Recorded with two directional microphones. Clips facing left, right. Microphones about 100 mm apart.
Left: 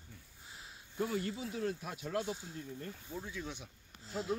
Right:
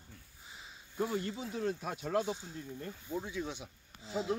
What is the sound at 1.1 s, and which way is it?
Speech, 30° right (ahead or behind).